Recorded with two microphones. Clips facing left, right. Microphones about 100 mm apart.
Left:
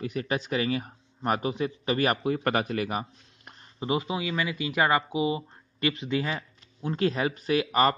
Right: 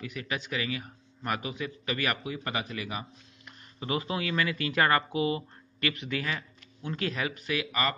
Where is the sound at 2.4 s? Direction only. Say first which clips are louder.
Left 8 dB; 50° left (ahead or behind).